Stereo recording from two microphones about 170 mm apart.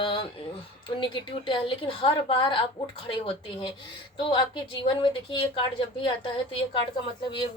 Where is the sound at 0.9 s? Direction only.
30° left (ahead or behind).